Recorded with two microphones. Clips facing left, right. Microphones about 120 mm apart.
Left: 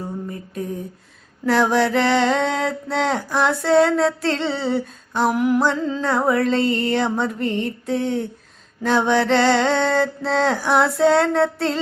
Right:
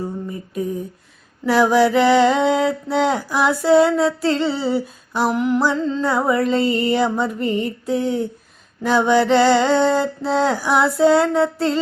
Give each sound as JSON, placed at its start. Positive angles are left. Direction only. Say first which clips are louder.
{"t": 0.0, "sound": "mantra", "louder": "right 2 dB", "side_deg": -5}